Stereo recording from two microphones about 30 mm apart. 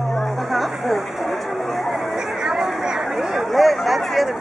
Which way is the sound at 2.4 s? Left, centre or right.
Centre.